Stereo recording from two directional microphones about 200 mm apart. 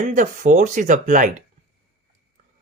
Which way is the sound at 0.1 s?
40° right (ahead or behind).